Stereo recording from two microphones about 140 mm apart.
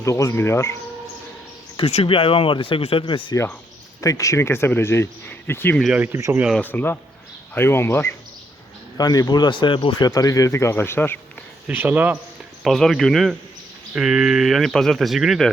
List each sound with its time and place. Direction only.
0.0 s speech: 20° left (ahead or behind)
1.7 s speech: 45° left (ahead or behind)
4.0 s speech: 25° left (ahead or behind)
5.9 s speech: 15° right (ahead or behind)
6.6 s speech: 15° left (ahead or behind)
9.0 s speech: 30° left (ahead or behind)
11.7 s speech: 15° right (ahead or behind)
12.6 s speech: centre (ahead or behind)